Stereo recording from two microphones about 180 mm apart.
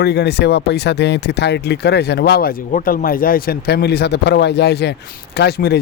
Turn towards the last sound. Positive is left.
turn(degrees=65)  # may be behind; listen again after turning